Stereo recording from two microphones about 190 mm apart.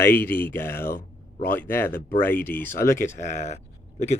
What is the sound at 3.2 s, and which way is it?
Speech, 40° left (ahead or behind).